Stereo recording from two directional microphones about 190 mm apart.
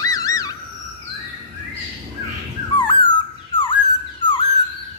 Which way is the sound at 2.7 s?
25° left (ahead or behind).